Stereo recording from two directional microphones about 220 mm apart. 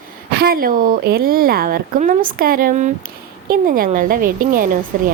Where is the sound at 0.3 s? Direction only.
45° right (ahead or behind).